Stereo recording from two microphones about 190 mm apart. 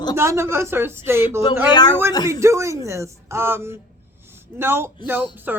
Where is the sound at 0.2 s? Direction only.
15° right (ahead or behind).